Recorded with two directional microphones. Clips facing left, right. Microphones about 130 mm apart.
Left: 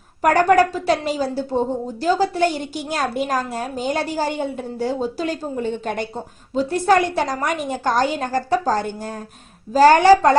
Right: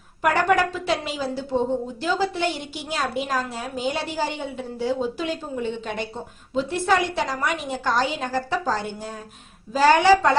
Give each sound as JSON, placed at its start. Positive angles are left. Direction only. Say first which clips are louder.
{"t": 0.2, "sound": "a woman's voice", "louder": "left 5 dB", "side_deg": 40}